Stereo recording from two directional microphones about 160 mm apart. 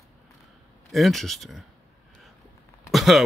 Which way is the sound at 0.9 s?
Centre (ahead or behind).